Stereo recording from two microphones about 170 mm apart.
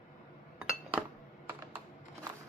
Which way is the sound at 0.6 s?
Centre (ahead or behind).